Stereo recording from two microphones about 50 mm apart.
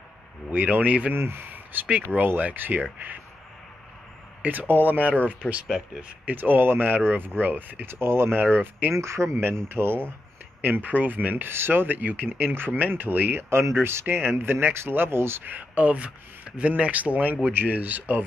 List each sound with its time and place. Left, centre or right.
0.5 s speech: right
1.1 s speech: right
4.4 s speech: right
5.1 s speech: left
5.9 s speech: right
7.9 s speech: right
8.9 s speech: right
10.6 s speech: right
11.4 s speech: right
13.4 s speech: right
15.4 s speech: right